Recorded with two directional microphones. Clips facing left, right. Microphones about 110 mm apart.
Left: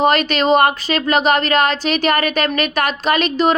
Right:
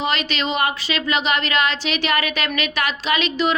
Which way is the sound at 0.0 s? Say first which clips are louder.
Left 8 dB; 50° left (ahead or behind).